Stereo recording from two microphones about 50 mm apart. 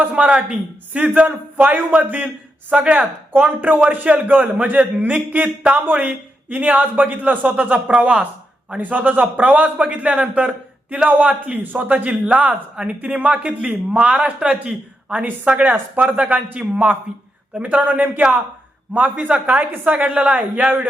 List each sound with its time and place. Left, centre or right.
0.0 s a man's voice: right